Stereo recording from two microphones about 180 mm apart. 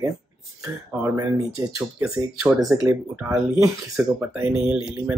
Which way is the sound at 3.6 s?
15° right (ahead or behind).